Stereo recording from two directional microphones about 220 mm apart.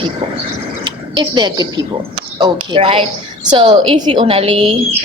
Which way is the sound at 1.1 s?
20° right (ahead or behind).